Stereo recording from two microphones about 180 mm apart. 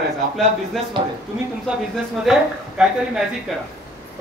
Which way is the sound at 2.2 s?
5° right (ahead or behind).